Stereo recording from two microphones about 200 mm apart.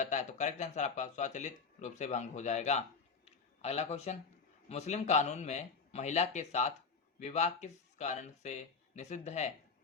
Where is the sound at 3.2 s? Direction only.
30° left (ahead or behind).